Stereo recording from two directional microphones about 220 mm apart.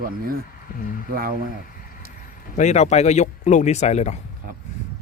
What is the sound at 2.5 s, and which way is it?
Speech, 30° left (ahead or behind).